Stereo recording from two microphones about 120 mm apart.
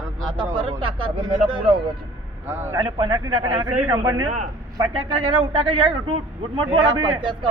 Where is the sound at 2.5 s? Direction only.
20° right (ahead or behind).